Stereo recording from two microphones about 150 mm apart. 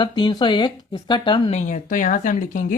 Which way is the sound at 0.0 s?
30° left (ahead or behind).